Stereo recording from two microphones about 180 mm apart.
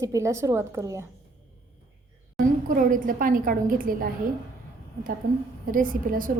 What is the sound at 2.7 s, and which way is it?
A woman's voice, 50° right (ahead or behind).